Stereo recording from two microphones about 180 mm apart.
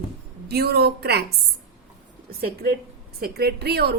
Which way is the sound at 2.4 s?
55° right (ahead or behind).